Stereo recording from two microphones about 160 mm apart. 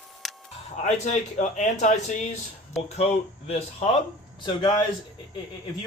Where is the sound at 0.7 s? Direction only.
50° left (ahead or behind).